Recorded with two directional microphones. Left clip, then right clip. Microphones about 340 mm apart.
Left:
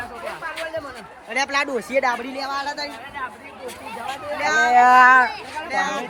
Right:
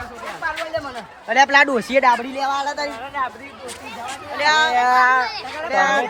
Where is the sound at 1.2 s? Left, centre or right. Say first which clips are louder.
Right 8 dB; centre.